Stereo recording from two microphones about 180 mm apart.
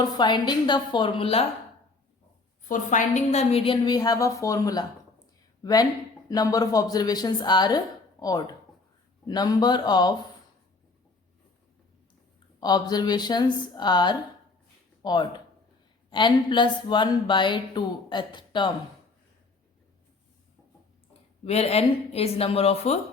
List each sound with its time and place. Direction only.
0.0 s a woman's voice: 25° left (ahead or behind)
2.6 s a woman's voice: 45° left (ahead or behind); by 7.8 s 25° left (ahead or behind)
9.2 s a woman's voice: 20° left (ahead or behind)
12.5 s a woman's voice: 20° left (ahead or behind)
21.1 s speech: 35° left (ahead or behind)